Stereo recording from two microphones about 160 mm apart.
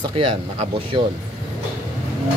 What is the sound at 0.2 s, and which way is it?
Speech, 35° right (ahead or behind).